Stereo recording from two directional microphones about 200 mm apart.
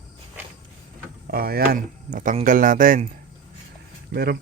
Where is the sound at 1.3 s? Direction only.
50° right (ahead or behind).